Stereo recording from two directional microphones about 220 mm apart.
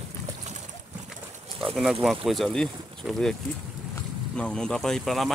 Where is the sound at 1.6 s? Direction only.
Centre (ahead or behind).